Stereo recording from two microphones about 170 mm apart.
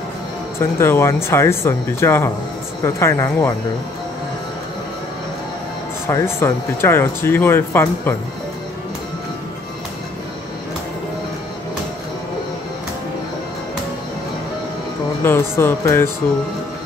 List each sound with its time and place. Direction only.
0.6 s speech: 15° left (ahead or behind)
6.1 s speech: 15° left (ahead or behind)
15.2 s speech: 15° left (ahead or behind)